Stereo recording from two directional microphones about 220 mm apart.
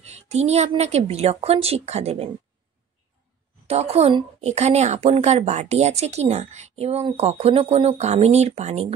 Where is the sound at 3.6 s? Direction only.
30° right (ahead or behind).